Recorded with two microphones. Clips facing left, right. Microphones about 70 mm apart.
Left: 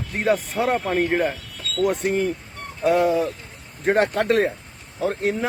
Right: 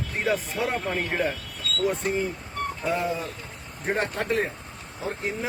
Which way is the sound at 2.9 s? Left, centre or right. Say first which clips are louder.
Left 10 dB; left.